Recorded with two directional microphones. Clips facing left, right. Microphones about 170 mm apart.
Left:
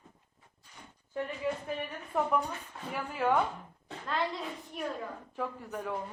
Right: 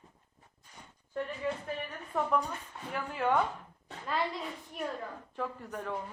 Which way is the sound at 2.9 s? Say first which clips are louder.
Left 1 dB; 5° left (ahead or behind).